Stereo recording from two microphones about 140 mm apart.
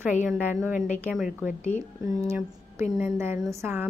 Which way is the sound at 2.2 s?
15° right (ahead or behind).